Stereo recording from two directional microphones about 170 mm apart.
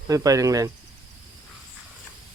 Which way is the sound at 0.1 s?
20° right (ahead or behind).